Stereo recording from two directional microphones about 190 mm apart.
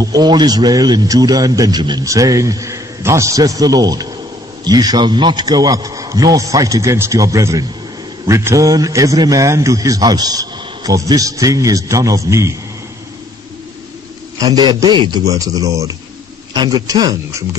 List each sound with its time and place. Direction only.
0.0 s a man's voice: 20° right (ahead or behind)
14.4 s speech: 20° right (ahead or behind)